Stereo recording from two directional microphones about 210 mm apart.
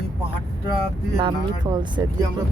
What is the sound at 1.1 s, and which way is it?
Speech, 20° right (ahead or behind).